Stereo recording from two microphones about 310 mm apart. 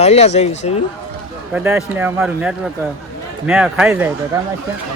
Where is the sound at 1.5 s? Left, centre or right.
Centre.